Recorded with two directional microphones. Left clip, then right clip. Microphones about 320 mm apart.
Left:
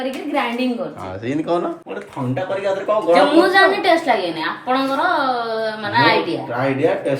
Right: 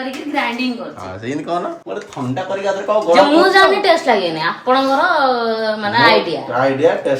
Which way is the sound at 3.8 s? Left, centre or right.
Right.